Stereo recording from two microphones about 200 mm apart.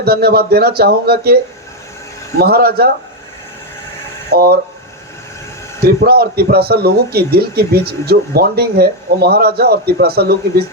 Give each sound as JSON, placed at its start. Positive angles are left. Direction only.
{"t": 0.0, "sound": "a man's voice", "side_deg": -50}
{"t": 2.4, "sound": "a man's voice", "side_deg": -50}
{"t": 4.3, "sound": "a man's voice", "side_deg": -50}
{"t": 5.8, "sound": "a man's voice", "side_deg": -50}